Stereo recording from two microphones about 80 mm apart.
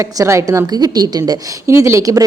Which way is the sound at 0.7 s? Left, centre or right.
Right.